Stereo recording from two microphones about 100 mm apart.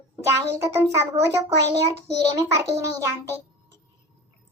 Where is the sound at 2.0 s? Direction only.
30° right (ahead or behind).